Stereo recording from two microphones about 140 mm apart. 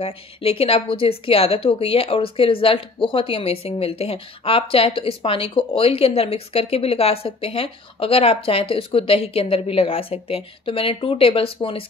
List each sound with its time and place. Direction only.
0.0 s a woman's voice: 45° left (ahead or behind)